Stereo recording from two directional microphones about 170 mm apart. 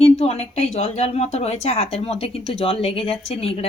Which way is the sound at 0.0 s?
35° left (ahead or behind).